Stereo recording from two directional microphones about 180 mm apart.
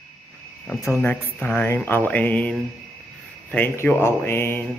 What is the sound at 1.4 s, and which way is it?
Speech, 10° left (ahead or behind).